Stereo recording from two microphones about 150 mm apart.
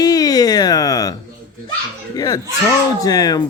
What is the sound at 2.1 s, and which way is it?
Speech, 25° left (ahead or behind).